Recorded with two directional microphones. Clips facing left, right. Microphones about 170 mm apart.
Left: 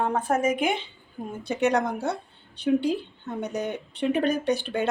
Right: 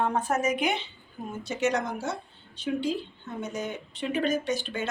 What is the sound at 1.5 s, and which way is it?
A woman's voice, 60° left (ahead or behind).